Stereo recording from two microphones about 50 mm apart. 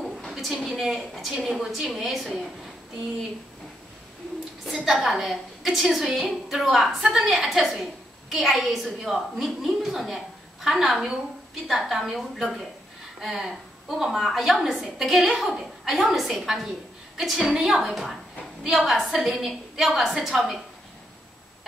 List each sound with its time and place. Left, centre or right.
0.3 s a sound: centre
0.7 s a woman's voice: centre
4.6 s a woman's voice: centre